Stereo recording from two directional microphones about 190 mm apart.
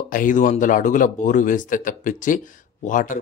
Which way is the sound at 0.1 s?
45° left (ahead or behind).